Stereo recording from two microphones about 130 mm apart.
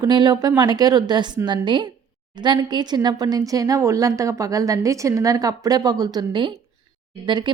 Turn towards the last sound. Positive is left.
turn(degrees=-35)  # may be behind; listen again after turning